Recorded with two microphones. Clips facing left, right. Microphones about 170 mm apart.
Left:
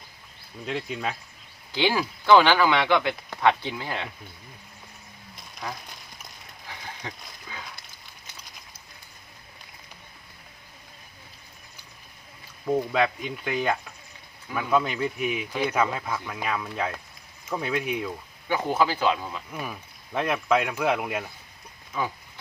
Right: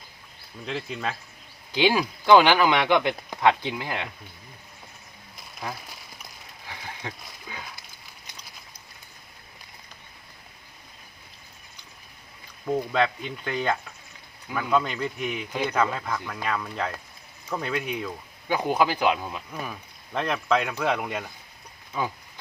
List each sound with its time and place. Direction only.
0.6 s speech: centre (ahead or behind)
1.7 s speech: 15° right (ahead or behind)
7.5 s a sound: 15° right (ahead or behind)
12.6 s speech: 5° left (ahead or behind)
18.4 s speech: 15° right (ahead or behind)
19.5 s speech: 5° left (ahead or behind)